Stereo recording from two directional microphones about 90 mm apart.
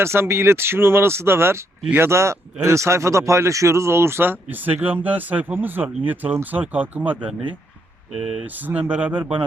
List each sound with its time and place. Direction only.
0.0 s speech: 30° right (ahead or behind)
8.1 s speech: 5° right (ahead or behind)
8.4 s speech: 20° right (ahead or behind)